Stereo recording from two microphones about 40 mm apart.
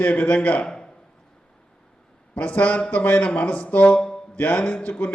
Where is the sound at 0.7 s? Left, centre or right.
Centre.